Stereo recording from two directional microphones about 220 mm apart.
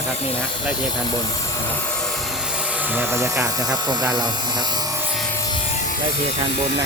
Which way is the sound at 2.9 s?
10° right (ahead or behind).